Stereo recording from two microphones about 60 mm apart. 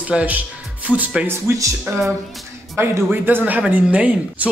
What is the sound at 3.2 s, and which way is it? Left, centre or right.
Speech, right.